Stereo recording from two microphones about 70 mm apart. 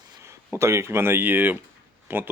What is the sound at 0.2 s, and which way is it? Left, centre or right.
Speech, right.